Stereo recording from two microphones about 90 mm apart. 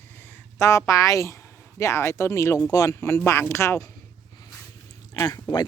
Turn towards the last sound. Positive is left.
turn(degrees=50)  # may be behind; listen again after turning